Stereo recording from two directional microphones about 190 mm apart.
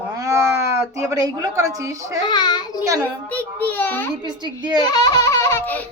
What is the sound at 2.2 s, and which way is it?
Speech, 25° left (ahead or behind).